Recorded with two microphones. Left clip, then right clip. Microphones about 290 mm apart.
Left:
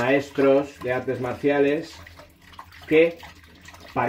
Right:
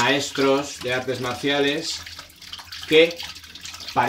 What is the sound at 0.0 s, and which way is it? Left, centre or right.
Speech, right.